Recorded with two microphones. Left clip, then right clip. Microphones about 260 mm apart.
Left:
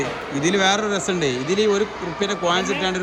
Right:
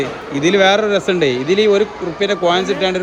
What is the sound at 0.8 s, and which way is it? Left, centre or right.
Speech, right.